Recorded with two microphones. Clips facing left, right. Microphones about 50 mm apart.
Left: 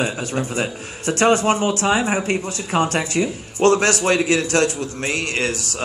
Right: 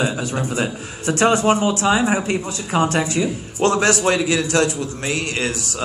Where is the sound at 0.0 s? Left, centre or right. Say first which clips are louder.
Right 1 dB; left.